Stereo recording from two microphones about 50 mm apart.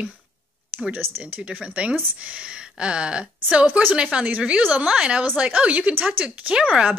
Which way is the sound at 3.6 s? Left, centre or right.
Right.